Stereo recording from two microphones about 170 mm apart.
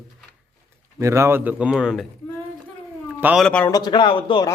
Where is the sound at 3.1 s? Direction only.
10° right (ahead or behind).